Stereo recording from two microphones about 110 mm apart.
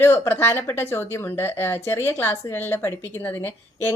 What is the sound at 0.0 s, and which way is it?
A woman's voice, 20° left (ahead or behind).